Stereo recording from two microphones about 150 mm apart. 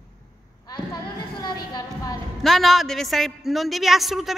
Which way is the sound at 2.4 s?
Centre (ahead or behind).